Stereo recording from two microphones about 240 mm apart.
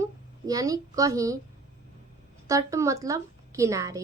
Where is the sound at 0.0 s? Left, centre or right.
Centre.